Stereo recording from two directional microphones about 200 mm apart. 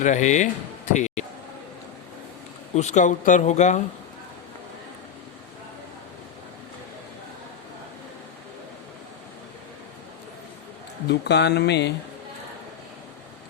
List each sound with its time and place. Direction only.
0.0 s speech: 35° left (ahead or behind)
0.9 s a sound: 35° left (ahead or behind)
2.7 s speech: 35° left (ahead or behind)
11.1 s mantra: 55° left (ahead or behind)